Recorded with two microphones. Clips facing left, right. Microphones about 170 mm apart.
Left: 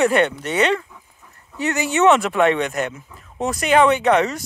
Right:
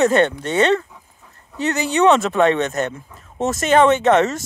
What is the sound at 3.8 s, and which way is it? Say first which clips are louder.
Speech: right 2 dB; 25° right (ahead or behind).